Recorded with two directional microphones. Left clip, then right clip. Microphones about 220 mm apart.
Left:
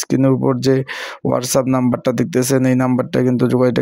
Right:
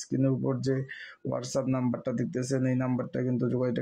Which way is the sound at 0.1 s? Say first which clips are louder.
Left 13 dB; 45° left (ahead or behind).